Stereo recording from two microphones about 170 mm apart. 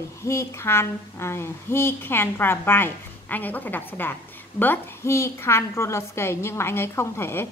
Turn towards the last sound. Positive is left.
turn(degrees=15)  # may be behind; listen again after turning